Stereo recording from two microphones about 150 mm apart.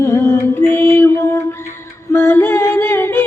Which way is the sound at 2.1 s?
15° left (ahead or behind).